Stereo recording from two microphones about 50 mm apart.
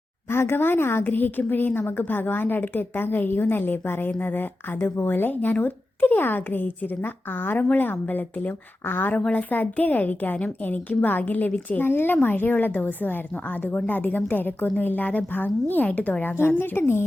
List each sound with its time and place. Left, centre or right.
0.3 s a woman's voice: left
1.0 s a woman's voice: left
8.8 s a woman's voice: left
9.3 s a woman's voice: left
11.8 s a woman's voice: left